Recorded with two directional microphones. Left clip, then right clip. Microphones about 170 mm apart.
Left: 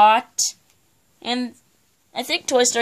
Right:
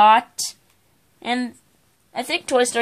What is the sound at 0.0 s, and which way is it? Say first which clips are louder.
Speech: right 1 dB; 20° left (ahead or behind).